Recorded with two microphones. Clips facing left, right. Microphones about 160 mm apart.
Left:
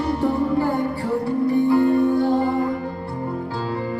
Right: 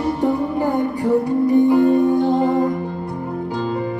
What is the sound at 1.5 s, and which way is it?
Music, 15° right (ahead or behind).